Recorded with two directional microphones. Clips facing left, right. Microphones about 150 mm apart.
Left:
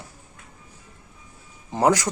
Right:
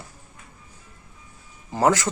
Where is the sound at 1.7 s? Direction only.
15° left (ahead or behind).